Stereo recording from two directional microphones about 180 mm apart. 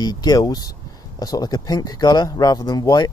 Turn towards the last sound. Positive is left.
turn(degrees=25)  # may be behind; listen again after turning